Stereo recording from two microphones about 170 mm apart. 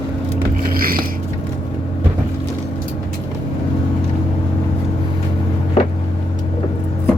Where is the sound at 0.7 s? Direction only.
60° right (ahead or behind).